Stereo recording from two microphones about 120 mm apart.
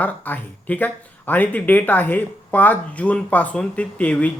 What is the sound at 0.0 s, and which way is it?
A man's voice, 15° left (ahead or behind).